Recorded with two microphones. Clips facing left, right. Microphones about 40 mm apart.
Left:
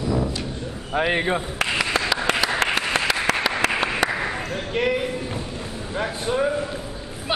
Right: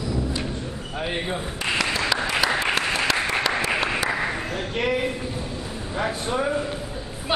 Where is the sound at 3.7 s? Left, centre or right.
Centre.